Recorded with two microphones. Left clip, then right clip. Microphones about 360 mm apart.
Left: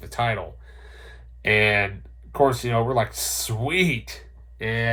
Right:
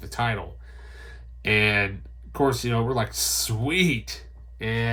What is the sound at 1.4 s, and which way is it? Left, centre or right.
Speech, centre.